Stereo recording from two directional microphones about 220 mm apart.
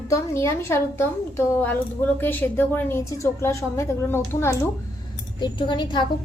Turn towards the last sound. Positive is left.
turn(degrees=20)  # may be behind; listen again after turning